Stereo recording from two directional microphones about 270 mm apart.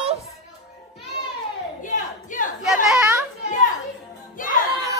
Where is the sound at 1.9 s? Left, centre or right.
Left.